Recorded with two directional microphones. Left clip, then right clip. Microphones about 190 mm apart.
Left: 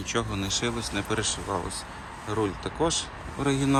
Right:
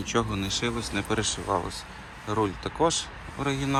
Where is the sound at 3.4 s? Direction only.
25° left (ahead or behind).